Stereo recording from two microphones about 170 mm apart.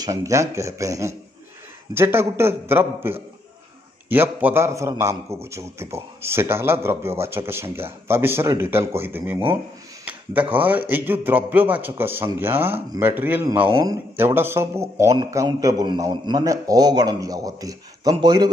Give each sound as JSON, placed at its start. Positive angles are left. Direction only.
{"t": 0.0, "sound": "a man's voice", "side_deg": -20}
{"t": 10.5, "sound": "a man's voice", "side_deg": -10}